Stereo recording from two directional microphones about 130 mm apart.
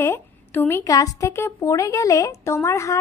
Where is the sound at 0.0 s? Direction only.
15° left (ahead or behind).